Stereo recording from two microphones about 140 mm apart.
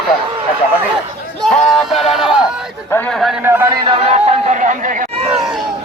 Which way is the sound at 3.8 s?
40° right (ahead or behind).